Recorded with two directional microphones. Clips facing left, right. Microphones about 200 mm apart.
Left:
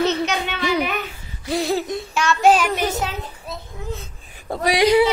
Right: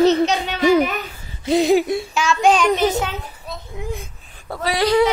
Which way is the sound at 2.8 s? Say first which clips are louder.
Right 4 dB; centre (ahead or behind).